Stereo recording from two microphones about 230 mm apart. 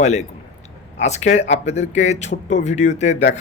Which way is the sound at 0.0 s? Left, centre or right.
Left.